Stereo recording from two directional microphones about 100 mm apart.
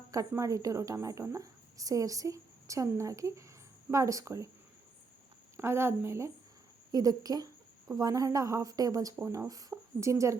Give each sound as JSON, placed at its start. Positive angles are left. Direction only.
{"t": 0.1, "sound": "a woman's voice", "side_deg": -35}
{"t": 5.5, "sound": "speech", "side_deg": -25}
{"t": 6.9, "sound": "a woman's voice", "side_deg": -40}
{"t": 9.1, "sound": "a woman's voice", "side_deg": -25}